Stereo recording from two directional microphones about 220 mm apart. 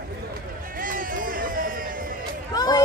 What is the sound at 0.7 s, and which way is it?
Run, 40° right (ahead or behind).